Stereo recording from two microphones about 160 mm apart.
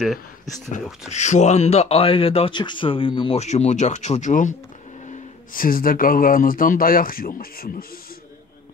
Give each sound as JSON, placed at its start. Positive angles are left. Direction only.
{"t": 0.0, "sound": "speech", "side_deg": 0}
{"t": 1.1, "sound": "speech", "side_deg": 45}